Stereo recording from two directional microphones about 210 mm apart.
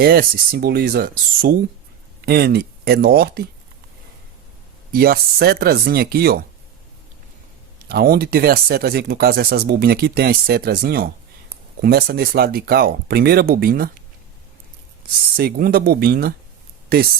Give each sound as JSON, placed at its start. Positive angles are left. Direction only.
{"t": 0.0, "sound": "speech", "side_deg": -45}
{"t": 4.9, "sound": "speech", "side_deg": -45}
{"t": 7.9, "sound": "speech", "side_deg": -45}
{"t": 15.4, "sound": "speech", "side_deg": -45}